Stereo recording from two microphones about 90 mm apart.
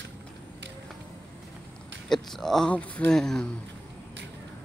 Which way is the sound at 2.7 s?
15° left (ahead or behind).